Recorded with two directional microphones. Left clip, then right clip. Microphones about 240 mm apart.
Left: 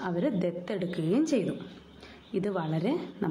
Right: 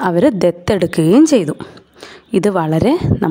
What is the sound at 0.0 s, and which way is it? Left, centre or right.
A woman's voice, right.